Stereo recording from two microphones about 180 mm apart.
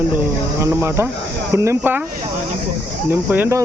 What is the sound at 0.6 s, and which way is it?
Speech, 15° right (ahead or behind).